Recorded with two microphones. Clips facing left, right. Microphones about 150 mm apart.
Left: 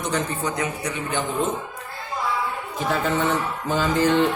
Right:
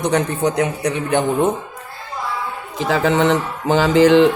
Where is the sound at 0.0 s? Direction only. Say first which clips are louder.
Right 8 dB; 65° right (ahead or behind).